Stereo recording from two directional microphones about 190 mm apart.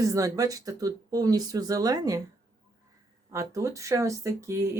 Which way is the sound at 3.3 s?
15° right (ahead or behind).